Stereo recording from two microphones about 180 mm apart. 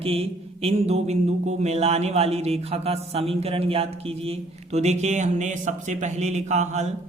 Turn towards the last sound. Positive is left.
turn(degrees=-40)  # may be behind; listen again after turning